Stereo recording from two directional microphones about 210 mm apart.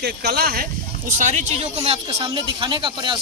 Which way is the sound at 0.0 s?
50° right (ahead or behind).